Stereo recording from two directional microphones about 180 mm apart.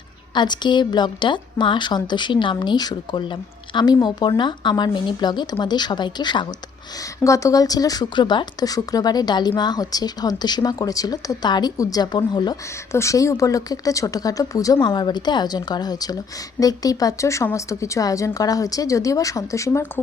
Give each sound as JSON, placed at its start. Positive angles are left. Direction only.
{"t": 0.3, "sound": "a woman's voice", "side_deg": 25}